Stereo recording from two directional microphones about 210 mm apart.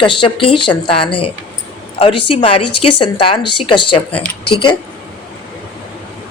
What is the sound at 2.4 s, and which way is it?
Speech, 25° left (ahead or behind).